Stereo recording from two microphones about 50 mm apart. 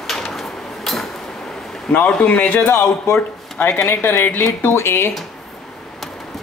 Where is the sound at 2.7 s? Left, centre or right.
Left.